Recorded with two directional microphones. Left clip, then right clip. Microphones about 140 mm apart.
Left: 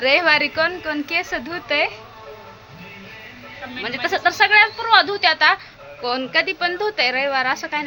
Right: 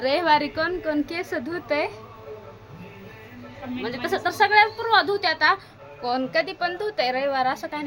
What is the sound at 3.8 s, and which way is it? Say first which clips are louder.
A woman's voice: left 6 dB; 10° left (ahead or behind).